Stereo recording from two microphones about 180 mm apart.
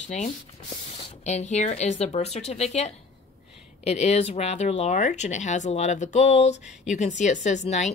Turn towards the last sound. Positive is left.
turn(degrees=40)  # may be behind; listen again after turning